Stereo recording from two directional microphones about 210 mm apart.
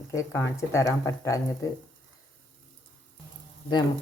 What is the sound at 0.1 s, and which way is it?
Speech, 15° left (ahead or behind).